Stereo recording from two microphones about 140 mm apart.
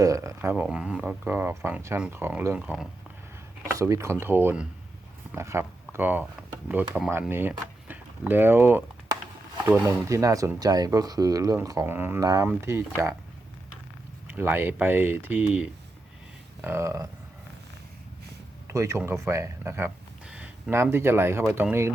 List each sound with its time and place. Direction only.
0.0 s speech: 20° right (ahead or behind)
0.5 s speech: 10° right (ahead or behind)
2.6 s speech: 5° right (ahead or behind)
3.7 s speech: 25° right (ahead or behind)
10.1 s speech: 25° right (ahead or behind)
12.2 s speech: 25° right (ahead or behind)
14.3 s speech: 15° right (ahead or behind)
18.7 s speech: 20° right (ahead or behind)